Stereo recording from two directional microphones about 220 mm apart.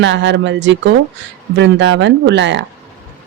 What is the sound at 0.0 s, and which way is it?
Speech, 55° right (ahead or behind).